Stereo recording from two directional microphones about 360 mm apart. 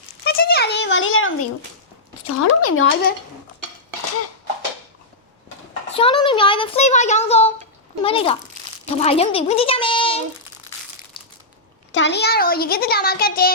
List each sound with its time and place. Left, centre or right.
0.3 s a sound: left
2.2 s speech: left
6.0 s speech: centre
11.9 s a child's voice: left